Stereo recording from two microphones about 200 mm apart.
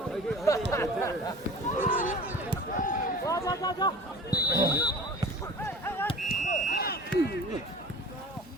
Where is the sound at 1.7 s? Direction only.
40° left (ahead or behind).